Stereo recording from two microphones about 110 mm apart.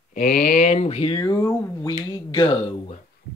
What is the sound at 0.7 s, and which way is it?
Speech, 75° left (ahead or behind).